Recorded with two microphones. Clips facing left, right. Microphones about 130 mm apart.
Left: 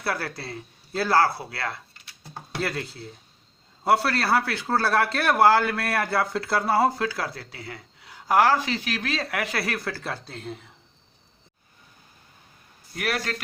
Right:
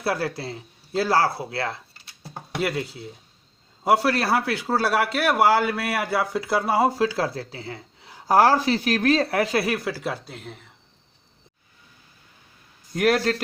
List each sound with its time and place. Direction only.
0.0 s speech: 20° right (ahead or behind)
2.6 s a man's voice: 15° right (ahead or behind)
12.9 s speech: 40° right (ahead or behind)